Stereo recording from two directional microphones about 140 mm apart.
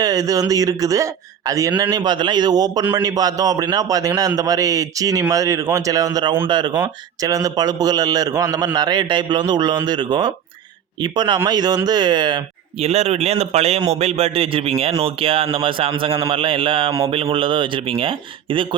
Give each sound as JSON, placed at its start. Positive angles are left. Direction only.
{"t": 0.0, "sound": "a man's voice", "side_deg": -25}
{"t": 12.8, "sound": "a man's voice", "side_deg": -50}